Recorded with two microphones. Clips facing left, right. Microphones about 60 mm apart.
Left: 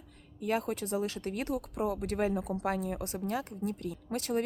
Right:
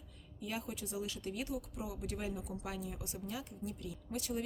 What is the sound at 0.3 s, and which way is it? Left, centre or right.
Speech, left.